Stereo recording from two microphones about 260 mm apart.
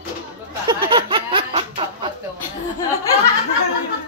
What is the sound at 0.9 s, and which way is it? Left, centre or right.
Snicker, centre.